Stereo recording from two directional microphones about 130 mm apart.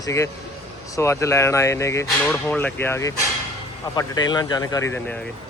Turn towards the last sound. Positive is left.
turn(degrees=25)  # may be behind; listen again after turning